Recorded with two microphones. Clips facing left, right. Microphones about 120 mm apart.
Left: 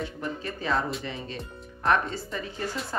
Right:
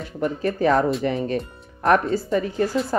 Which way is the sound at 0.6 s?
50° right (ahead or behind).